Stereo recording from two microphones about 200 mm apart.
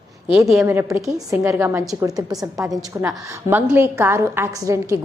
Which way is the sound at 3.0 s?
10° right (ahead or behind).